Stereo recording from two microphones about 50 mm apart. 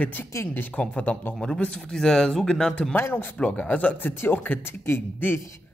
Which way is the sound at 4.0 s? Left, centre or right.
Left.